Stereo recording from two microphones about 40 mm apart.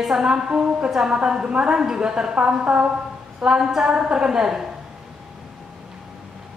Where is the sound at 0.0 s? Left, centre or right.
Centre.